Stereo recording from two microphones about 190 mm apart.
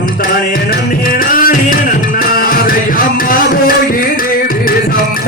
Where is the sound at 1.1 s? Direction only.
50° left (ahead or behind).